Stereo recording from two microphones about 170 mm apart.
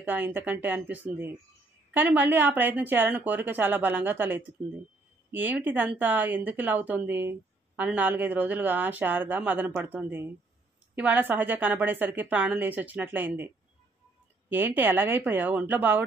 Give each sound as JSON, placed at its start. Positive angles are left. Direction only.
{"t": 0.0, "sound": "speech", "side_deg": -10}
{"t": 14.5, "sound": "speech", "side_deg": -10}